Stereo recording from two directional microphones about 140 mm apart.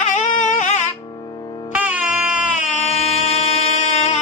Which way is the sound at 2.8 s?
50° left (ahead or behind).